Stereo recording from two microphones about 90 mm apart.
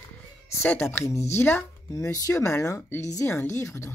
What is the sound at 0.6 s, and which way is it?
A woman's voice, 20° left (ahead or behind).